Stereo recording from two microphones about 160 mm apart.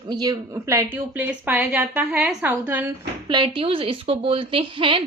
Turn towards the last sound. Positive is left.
turn(degrees=-30)  # may be behind; listen again after turning